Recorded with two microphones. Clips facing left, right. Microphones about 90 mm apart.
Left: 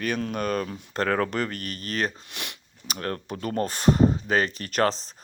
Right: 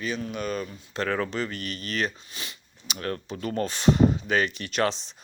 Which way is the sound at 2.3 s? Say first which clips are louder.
Left 3 dB; 65° left (ahead or behind).